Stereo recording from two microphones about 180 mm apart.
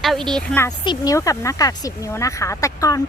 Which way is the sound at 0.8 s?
20° left (ahead or behind).